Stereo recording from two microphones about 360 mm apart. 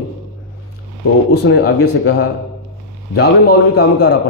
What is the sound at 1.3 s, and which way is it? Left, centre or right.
Speech, left.